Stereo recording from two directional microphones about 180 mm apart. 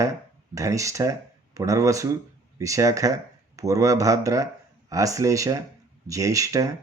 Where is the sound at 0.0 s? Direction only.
15° right (ahead or behind).